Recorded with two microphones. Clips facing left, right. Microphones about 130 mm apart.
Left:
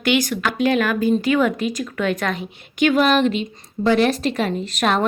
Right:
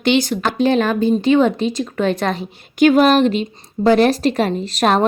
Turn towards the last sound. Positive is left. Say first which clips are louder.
# right 4 dB
turn(degrees=-35)  # may be behind; listen again after turning